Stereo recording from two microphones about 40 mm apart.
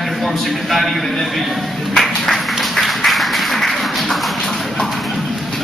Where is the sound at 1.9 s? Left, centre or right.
Centre.